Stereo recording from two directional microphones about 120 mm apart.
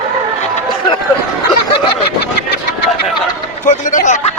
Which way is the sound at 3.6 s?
90° left.